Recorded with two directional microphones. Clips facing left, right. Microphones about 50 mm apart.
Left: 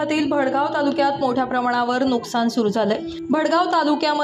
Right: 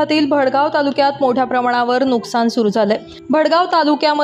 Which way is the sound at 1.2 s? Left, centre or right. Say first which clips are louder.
Right 5 dB; right.